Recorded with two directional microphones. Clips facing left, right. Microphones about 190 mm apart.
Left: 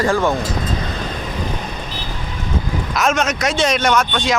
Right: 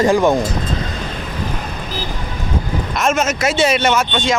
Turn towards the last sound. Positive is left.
turn(degrees=-5)  # may be behind; listen again after turning